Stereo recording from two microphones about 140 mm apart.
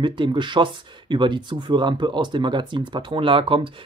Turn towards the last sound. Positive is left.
turn(degrees=-40)  # may be behind; listen again after turning